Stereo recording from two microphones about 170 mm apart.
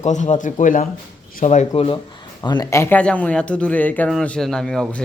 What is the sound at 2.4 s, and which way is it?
Speech, 25° left (ahead or behind).